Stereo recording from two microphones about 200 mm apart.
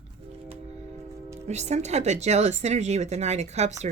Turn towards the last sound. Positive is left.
turn(degrees=-35)  # may be behind; listen again after turning